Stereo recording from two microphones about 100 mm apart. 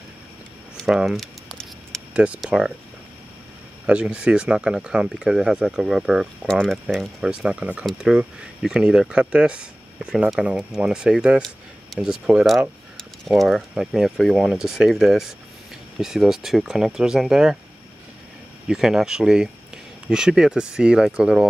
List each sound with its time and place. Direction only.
0.8 s speech: 5° right (ahead or behind)
1.2 s a sound: 5° left (ahead or behind)
2.4 s speech: 5° right (ahead or behind)
3.8 s speech: 10° right (ahead or behind)
6.4 s speech: 5° left (ahead or behind)
18.7 s speech: 5° right (ahead or behind)